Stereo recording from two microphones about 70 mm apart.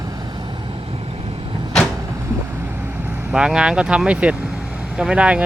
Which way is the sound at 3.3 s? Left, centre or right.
Centre.